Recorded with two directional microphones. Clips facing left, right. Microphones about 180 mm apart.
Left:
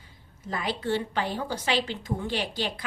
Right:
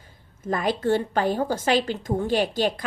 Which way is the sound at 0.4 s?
45° right (ahead or behind).